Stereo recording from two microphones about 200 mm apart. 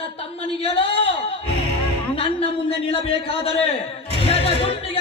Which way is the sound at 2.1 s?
30° left (ahead or behind).